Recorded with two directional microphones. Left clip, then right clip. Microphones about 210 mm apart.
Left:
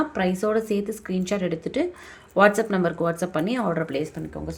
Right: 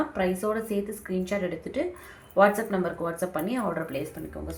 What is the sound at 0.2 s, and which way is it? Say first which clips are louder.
A woman's voice: left 4 dB; 45° left (ahead or behind).